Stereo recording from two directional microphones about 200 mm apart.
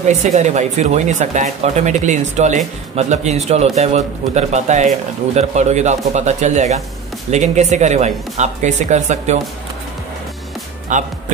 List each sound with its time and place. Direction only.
0.2 s speech: 35° right (ahead or behind)
10.9 s speech: 40° right (ahead or behind)